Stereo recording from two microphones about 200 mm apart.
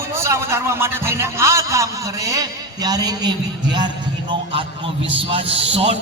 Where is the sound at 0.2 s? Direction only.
15° right (ahead or behind).